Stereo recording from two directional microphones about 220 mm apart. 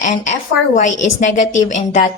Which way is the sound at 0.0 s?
35° left (ahead or behind).